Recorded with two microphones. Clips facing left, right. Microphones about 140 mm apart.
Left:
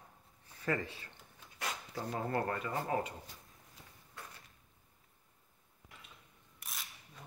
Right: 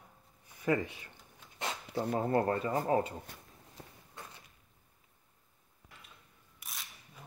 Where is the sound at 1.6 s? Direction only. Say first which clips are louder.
Right 3 dB; 25° right (ahead or behind).